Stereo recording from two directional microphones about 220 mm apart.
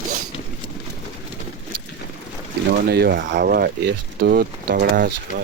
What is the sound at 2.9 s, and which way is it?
Speech, 45° right (ahead or behind).